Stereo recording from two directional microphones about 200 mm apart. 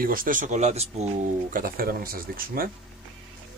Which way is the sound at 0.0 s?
45° right (ahead or behind).